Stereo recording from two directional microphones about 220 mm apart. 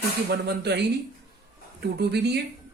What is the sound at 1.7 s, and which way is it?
Speech, 50° right (ahead or behind).